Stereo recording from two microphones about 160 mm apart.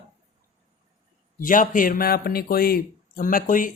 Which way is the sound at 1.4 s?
55° left (ahead or behind).